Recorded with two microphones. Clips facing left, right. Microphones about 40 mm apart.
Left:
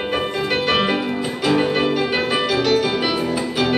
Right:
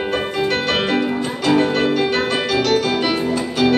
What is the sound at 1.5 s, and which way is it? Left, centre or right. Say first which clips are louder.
Music: right 2 dB; centre.